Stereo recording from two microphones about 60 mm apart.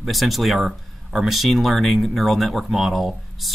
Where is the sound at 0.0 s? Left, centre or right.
Centre.